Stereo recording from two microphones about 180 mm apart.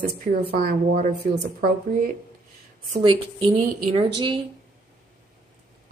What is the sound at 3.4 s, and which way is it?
A woman's voice, 30° right (ahead or behind).